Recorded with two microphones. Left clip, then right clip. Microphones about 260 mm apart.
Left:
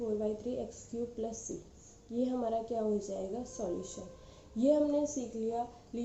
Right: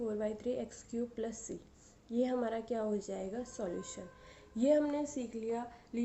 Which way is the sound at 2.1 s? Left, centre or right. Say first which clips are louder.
Left 1 dB; right.